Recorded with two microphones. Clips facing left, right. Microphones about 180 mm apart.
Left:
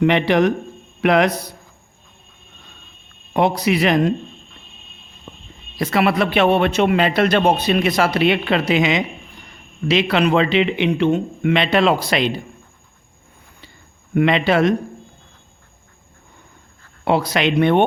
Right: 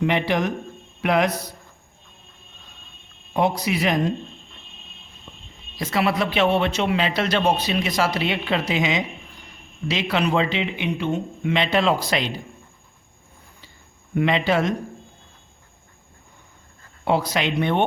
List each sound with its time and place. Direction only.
0.0 s speech: 70° left (ahead or behind)
3.3 s speech: 70° left (ahead or behind)
5.3 s whispering: 55° left (ahead or behind)
5.7 s a man's voice: 65° left (ahead or behind)
14.1 s speech: 70° left (ahead or behind)
17.1 s speech: 70° left (ahead or behind)